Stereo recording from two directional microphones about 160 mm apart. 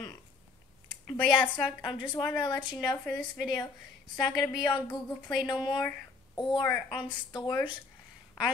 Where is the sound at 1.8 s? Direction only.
30° left (ahead or behind).